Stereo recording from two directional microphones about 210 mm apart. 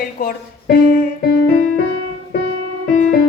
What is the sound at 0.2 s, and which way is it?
Speech, 45° left (ahead or behind).